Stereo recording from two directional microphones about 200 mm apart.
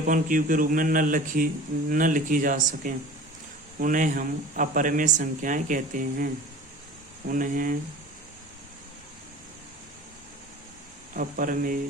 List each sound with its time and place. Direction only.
0.0 s speech: 40° right (ahead or behind)
11.1 s speech: 40° right (ahead or behind)